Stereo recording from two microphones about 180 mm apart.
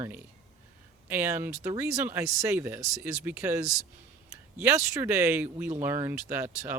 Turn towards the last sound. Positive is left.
turn(degrees=-10)  # may be behind; listen again after turning